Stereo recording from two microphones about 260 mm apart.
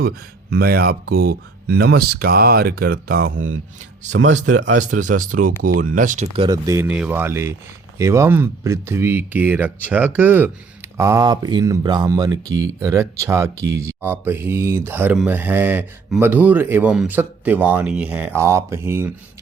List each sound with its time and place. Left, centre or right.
0.5 s speech: right
4.1 s a man's voice: right
4.8 s speech: right; by 19.1 s centre